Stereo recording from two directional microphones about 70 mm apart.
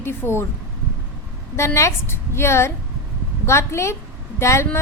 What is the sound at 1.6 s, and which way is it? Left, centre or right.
A woman's voice, left.